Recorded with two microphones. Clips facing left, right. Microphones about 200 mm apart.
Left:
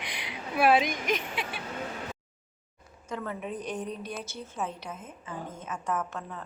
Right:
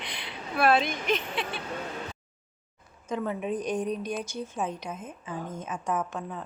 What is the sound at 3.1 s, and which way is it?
A woman's voice, 15° right (ahead or behind).